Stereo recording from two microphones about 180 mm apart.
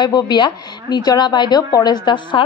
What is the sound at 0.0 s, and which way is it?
A woman's voice, 25° left (ahead or behind).